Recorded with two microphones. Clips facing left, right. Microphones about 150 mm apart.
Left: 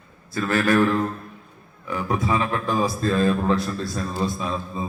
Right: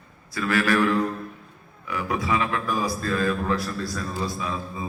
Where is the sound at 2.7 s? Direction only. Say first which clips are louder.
Left 4 dB; 25° left (ahead or behind).